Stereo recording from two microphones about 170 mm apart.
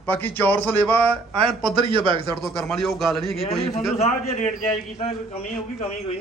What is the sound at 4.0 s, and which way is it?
Speech, 40° left (ahead or behind).